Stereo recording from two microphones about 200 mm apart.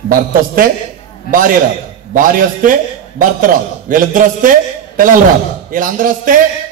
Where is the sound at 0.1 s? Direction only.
45° right (ahead or behind).